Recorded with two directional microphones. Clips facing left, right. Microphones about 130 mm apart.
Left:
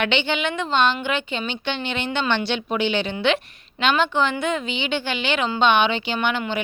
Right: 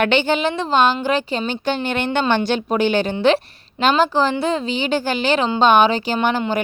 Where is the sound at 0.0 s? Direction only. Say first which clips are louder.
Right 5 dB; 45° right (ahead or behind).